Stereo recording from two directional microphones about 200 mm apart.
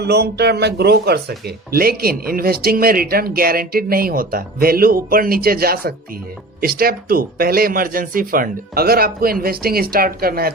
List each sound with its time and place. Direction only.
0.0 s speech: 55° right (ahead or behind)